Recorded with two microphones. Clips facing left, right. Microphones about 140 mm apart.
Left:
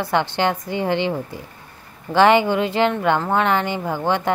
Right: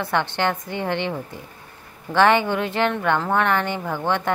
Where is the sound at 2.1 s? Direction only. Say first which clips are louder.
Left 3 dB; 10° left (ahead or behind).